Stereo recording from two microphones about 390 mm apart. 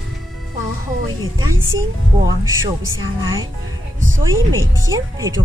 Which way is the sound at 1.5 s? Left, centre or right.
Right.